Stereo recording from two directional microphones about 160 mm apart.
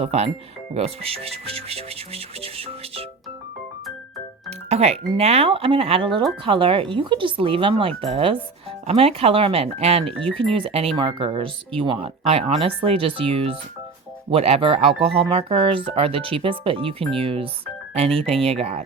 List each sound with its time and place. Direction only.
0.0 s speech: 40° right (ahead or behind)
4.4 s speech: 40° right (ahead or behind)